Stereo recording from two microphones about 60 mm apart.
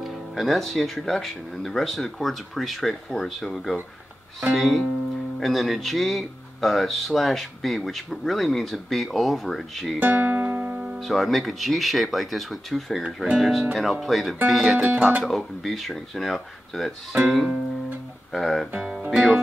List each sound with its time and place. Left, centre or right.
0.0 s speech: centre
9.9 s music: right
10.7 s music: centre
11.0 s speech: centre
18.8 s music: centre